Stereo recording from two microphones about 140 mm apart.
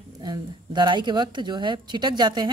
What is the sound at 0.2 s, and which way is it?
Speech, 30° right (ahead or behind).